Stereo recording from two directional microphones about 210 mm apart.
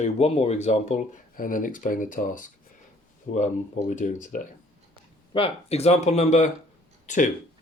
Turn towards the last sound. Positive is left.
turn(degrees=35)  # may be behind; listen again after turning